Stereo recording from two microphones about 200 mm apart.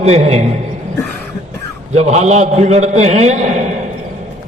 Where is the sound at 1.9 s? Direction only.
35° right (ahead or behind).